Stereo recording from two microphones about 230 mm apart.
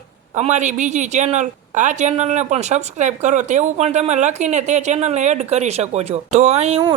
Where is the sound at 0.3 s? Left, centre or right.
Right.